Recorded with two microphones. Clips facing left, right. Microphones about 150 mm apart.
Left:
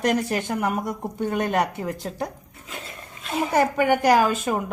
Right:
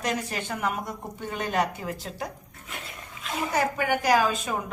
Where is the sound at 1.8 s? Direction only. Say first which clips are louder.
Left 5 dB; 35° left (ahead or behind).